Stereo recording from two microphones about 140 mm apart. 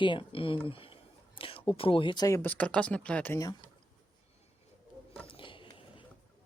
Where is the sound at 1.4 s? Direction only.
40° left (ahead or behind).